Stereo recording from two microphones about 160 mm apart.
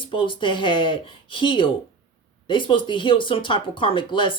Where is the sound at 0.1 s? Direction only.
30° left (ahead or behind).